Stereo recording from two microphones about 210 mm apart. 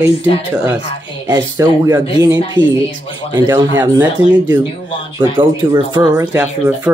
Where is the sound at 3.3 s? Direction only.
20° right (ahead or behind).